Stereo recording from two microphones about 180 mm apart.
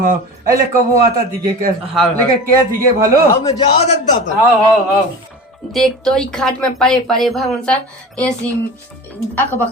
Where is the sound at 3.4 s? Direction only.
30° left (ahead or behind).